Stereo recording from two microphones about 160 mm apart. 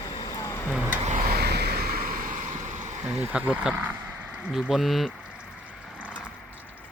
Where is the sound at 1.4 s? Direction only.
90° right; by 3.1 s 50° right (ahead or behind).